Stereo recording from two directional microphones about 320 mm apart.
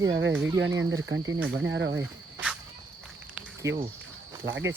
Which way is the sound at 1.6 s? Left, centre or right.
Right.